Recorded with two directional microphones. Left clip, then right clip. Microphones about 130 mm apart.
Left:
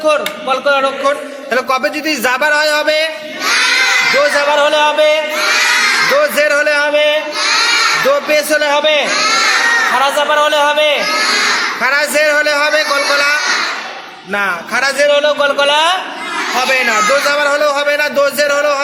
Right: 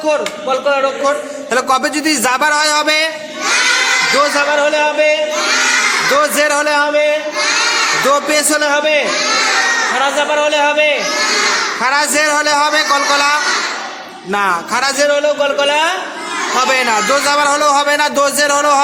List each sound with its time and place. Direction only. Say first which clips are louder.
0.0 s a man's voice: left 2 dB; 20° right (ahead or behind)
1.5 s speech: even; 30° right (ahead or behind)
4.2 s a man's voice: left 1 dB; 25° right (ahead or behind)
4.6 s music: left 2 dB; 15° right (ahead or behind)
6.1 s speech: left 1 dB; 30° right (ahead or behind)
8.1 s a man's voice: left 1 dB; 30° right (ahead or behind)